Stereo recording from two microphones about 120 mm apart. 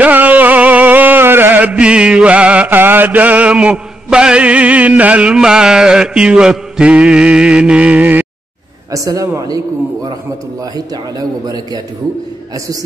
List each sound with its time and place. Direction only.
0.0 s music: 15° right (ahead or behind)
8.9 s a man's voice: 30° right (ahead or behind)
11.4 s a man's voice: 35° right (ahead or behind)